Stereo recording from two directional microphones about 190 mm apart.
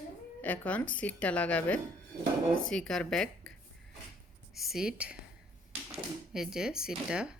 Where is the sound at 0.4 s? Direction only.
5° left (ahead or behind).